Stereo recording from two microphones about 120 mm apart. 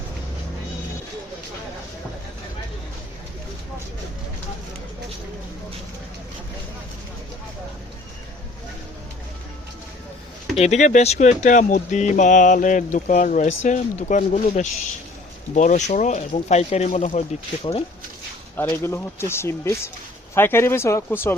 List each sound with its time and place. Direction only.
10.6 s speech: 70° left (ahead or behind)
11.4 s speech: 90° left
16.3 s speech: 65° left (ahead or behind)
17.6 s speech: 55° left (ahead or behind)
18.5 s speech: 20° left (ahead or behind)